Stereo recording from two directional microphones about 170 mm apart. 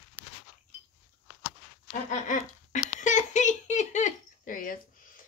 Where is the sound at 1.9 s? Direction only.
50° left (ahead or behind).